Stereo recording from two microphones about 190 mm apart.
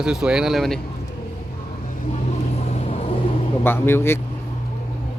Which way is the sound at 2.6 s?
30° left (ahead or behind).